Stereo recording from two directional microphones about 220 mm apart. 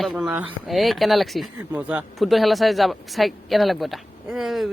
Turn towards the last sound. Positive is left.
turn(degrees=0)  # may be behind; listen again after turning